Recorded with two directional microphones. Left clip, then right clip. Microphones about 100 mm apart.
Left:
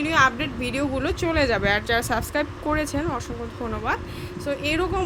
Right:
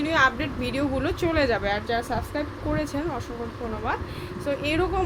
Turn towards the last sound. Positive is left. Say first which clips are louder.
# left 1 dB
turn(degrees=15)  # may be behind; listen again after turning